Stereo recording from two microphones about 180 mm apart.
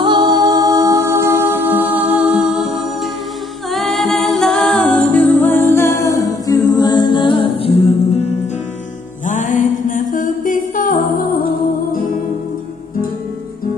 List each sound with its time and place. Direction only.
0.0 s music: 25° right (ahead or behind); by 2.8 s 5° right (ahead or behind)
3.7 s a capella: centre (ahead or behind); by 7.7 s 30° left (ahead or behind)
9.2 s music: 45° left (ahead or behind)